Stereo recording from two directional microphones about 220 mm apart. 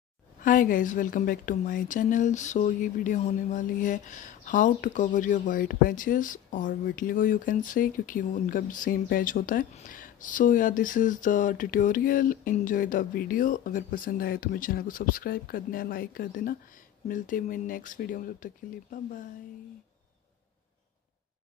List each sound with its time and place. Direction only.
0.4 s a woman's voice: 40° left (ahead or behind)